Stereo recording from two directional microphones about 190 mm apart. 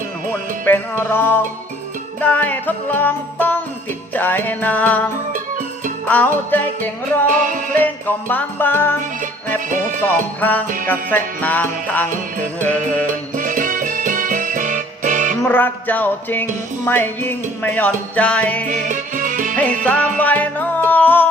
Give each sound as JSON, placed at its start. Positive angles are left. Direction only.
{"t": 0.6, "sound": "music", "side_deg": 10}
{"t": 6.1, "sound": "music", "side_deg": 10}
{"t": 7.3, "sound": "music", "side_deg": -45}
{"t": 7.8, "sound": "music", "side_deg": 10}
{"t": 9.6, "sound": "music", "side_deg": -45}
{"t": 10.8, "sound": "music", "side_deg": 10}
{"t": 13.3, "sound": "music", "side_deg": -45}
{"t": 15.4, "sound": "music", "side_deg": 10}
{"t": 18.7, "sound": "music", "side_deg": -45}
{"t": 19.5, "sound": "music", "side_deg": 5}